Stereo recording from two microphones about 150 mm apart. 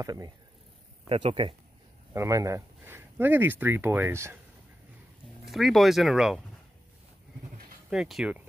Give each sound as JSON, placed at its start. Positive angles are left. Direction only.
{"t": 0.0, "sound": "speech", "side_deg": -25}
{"t": 1.0, "sound": "speech", "side_deg": -40}
{"t": 2.1, "sound": "speech", "side_deg": -20}
{"t": 5.4, "sound": "speech", "side_deg": 0}
{"t": 7.9, "sound": "speech", "side_deg": -5}